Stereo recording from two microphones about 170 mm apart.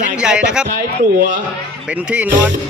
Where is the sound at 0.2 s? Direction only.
5° right (ahead or behind).